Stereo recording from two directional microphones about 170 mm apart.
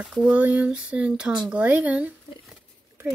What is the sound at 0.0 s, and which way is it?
Speech, 5° right (ahead or behind).